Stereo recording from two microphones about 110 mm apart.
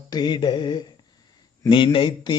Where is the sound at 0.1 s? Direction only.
40° left (ahead or behind).